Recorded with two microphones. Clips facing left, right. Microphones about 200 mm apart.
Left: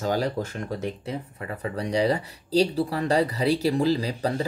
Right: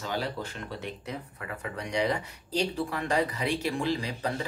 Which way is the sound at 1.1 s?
30° left (ahead or behind).